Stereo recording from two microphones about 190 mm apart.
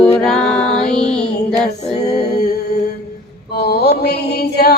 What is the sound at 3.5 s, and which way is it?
Mantra, 55° left (ahead or behind).